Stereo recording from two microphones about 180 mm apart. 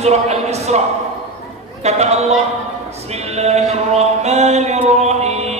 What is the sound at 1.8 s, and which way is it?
Speech, 35° right (ahead or behind).